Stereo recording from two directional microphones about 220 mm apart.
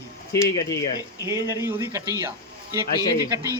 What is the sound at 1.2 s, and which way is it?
Speech, 15° right (ahead or behind).